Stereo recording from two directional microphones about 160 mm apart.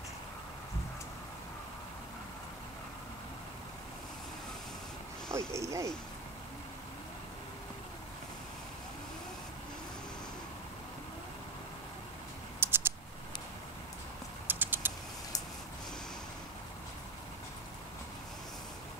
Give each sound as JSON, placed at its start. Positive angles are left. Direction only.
{"t": 5.3, "sound": "speech", "side_deg": -20}
{"t": 12.5, "sound": "a sound", "side_deg": -15}
{"t": 14.5, "sound": "typing", "side_deg": -10}